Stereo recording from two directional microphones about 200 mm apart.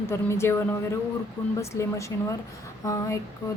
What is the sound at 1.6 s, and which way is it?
A woman's voice, 15° left (ahead or behind).